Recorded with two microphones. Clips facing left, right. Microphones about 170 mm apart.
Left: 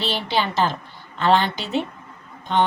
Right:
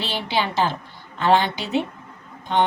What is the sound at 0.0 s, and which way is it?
A woman's voice, 15° right (ahead or behind).